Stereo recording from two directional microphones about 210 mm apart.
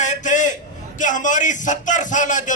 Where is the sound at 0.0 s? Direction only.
35° left (ahead or behind).